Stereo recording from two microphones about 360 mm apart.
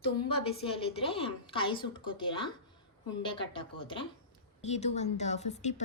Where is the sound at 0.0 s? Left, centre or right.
Centre.